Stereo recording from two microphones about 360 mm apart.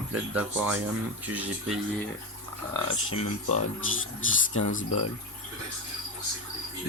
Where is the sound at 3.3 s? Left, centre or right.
Left.